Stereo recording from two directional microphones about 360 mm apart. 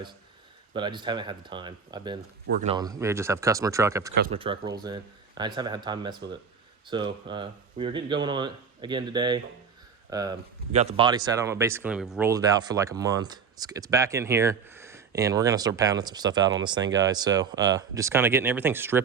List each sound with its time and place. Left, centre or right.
0.7 s speech: centre
4.1 s speech: right
4.4 s speech: centre